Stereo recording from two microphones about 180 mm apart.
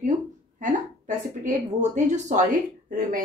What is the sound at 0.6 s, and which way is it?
A woman's voice, 40° right (ahead or behind).